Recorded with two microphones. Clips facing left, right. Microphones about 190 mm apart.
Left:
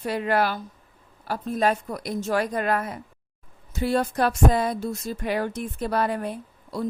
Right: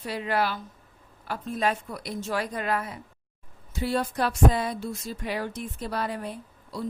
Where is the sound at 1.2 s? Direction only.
40° left (ahead or behind).